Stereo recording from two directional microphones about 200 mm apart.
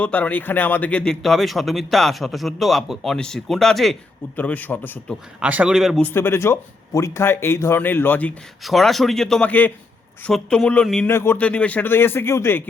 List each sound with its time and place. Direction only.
0.0 s speech: 5° left (ahead or behind)
5.4 s speech: 5° right (ahead or behind)
6.1 s speech: 10° left (ahead or behind)